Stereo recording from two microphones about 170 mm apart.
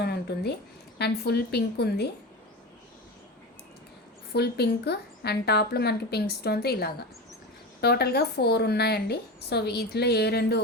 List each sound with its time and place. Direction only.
0.0 s a sound: 70° left (ahead or behind)
0.9 s speech: 75° left (ahead or behind)
4.3 s speech: 70° left (ahead or behind)